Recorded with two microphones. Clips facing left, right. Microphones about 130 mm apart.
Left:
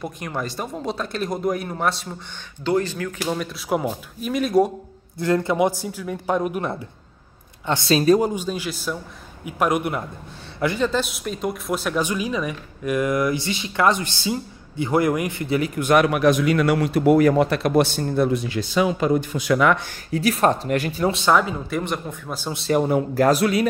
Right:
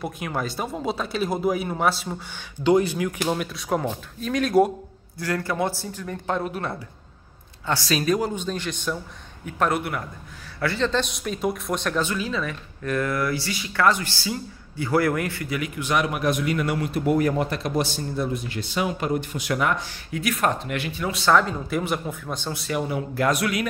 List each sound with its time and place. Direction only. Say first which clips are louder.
0.0 s speech: even; 5° right (ahead or behind)
3.5 s speech: left 2 dB; 5° left (ahead or behind)
5.2 s speech: left 6 dB; 20° left (ahead or behind)
8.2 s speech: left 3 dB; 10° left (ahead or behind)
15.5 s speech: left 9 dB; 35° left (ahead or behind)
15.8 s a man's voice: left 7 dB; 55° left (ahead or behind); by 18.7 s 85° left
20.1 s speech: left 5 dB; 35° left (ahead or behind)
21.1 s speech: even; 20° left (ahead or behind)
21.4 s speech: left 1 dB; centre (ahead or behind)
22.7 s speech: left 8 dB; 45° left (ahead or behind)